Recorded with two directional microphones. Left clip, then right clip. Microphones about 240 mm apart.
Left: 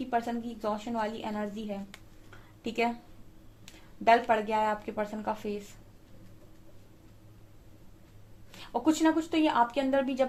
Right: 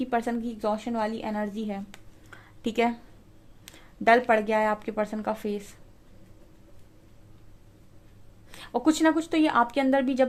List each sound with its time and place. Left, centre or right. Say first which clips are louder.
0.0 s speech: right 3 dB; right
2.3 s a sound: right 6 dB; right
3.7 s speech: right 3 dB; right
8.5 s speech: right 3 dB; right